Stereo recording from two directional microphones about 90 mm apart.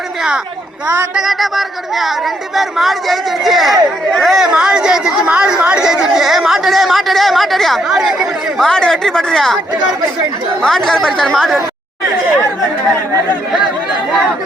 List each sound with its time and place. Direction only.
1.1 s speech: 5° right (ahead or behind)
10.6 s speech: 5° left (ahead or behind)